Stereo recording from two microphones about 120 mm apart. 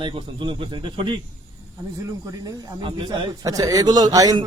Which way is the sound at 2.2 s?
30° right (ahead or behind).